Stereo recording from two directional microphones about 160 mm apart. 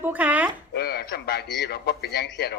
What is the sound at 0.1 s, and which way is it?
Speech, 10° right (ahead or behind).